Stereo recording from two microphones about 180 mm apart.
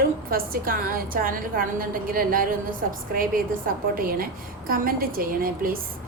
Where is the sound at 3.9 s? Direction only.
55° right (ahead or behind).